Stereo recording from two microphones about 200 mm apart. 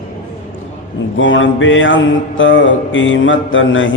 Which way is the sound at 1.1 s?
70° left (ahead or behind).